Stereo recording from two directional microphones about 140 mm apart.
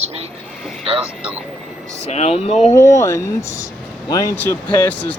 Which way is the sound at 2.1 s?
50° left (ahead or behind).